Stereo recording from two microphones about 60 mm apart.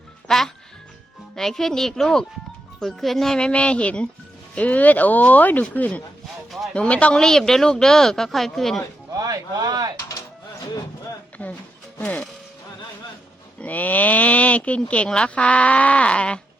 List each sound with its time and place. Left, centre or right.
0.3 s music: centre
1.4 s speech: centre
9.1 s speech: right
11.4 s a woman's voice: left
13.6 s speech: left